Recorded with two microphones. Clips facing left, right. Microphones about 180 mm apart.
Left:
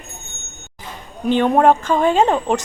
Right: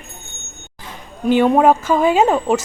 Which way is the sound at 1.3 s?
10° right (ahead or behind).